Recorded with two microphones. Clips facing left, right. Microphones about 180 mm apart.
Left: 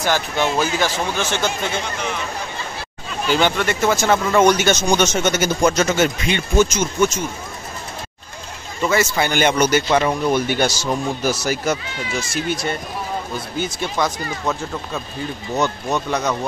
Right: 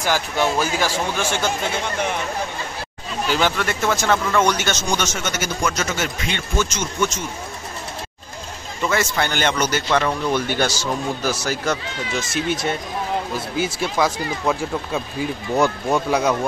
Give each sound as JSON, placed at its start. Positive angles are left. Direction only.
{"t": 0.0, "sound": "speech", "side_deg": -10}
{"t": 3.3, "sound": "speech", "side_deg": -5}
{"t": 4.3, "sound": "speech", "side_deg": 15}
{"t": 6.2, "sound": "speech", "side_deg": 15}
{"t": 8.8, "sound": "speech", "side_deg": 5}
{"t": 12.3, "sound": "speech", "side_deg": 0}
{"t": 13.7, "sound": "speech", "side_deg": -5}